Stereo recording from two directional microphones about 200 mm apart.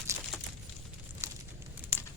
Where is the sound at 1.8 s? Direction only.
10° right (ahead or behind).